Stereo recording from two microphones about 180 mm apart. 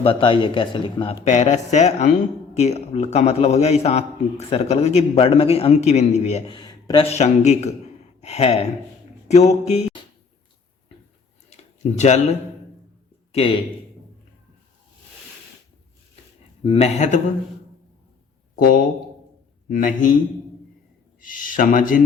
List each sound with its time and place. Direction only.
0.0 s speech: 30° left (ahead or behind)
1.2 s a man's voice: 40° left (ahead or behind)
6.6 s a sound: 25° left (ahead or behind)
7.0 s a man's voice: 40° left (ahead or behind)
11.4 s a sound: 40° left (ahead or behind)
16.6 s a man's voice: 35° left (ahead or behind)
18.5 s a man's voice: 50° left (ahead or behind)
21.2 s speech: 50° left (ahead or behind)